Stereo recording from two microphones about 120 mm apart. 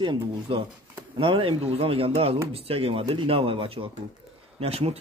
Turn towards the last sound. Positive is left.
turn(degrees=-55)  # may be behind; listen again after turning